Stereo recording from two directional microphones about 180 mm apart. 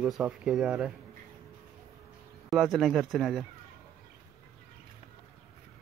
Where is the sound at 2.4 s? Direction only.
Centre (ahead or behind).